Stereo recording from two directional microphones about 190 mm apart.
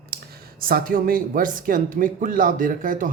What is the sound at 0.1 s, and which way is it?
Speech, 55° right (ahead or behind).